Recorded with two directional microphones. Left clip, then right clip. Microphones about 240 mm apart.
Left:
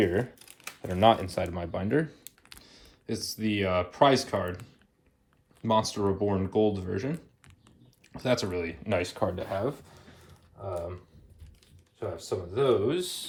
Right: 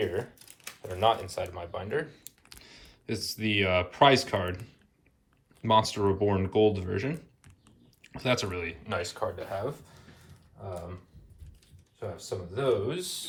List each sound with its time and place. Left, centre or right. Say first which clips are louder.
0.0 s speech: left 4 dB; left
0.3 s a sound: left 2 dB; left
0.9 s speech: left 4 dB; left
2.4 s speech: right 1 dB; centre
5.6 s speech: right 2 dB; centre
9.0 s speech: left 2 dB; left
11.9 s speech: left 3 dB; left